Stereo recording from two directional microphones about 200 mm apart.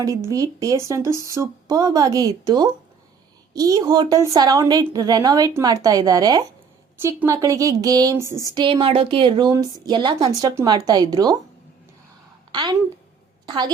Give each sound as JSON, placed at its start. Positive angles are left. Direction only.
{"t": 0.3, "sound": "a woman's voice", "side_deg": -15}
{"t": 12.5, "sound": "a woman's voice", "side_deg": -20}